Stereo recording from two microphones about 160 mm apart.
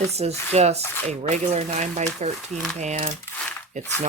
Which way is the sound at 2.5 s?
Centre (ahead or behind).